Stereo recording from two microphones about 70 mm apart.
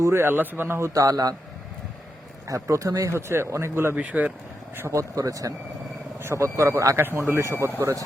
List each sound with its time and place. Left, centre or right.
0.0 s speech: right
0.9 s a man's voice: right
2.5 s speech: right
3.9 s speech: centre
4.9 s speech: right
6.1 s speech: right